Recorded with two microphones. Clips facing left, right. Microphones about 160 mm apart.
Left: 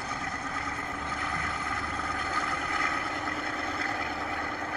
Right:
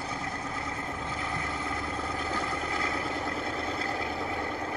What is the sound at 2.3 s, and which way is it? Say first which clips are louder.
Vehicle: right 2 dB; 25° right (ahead or behind).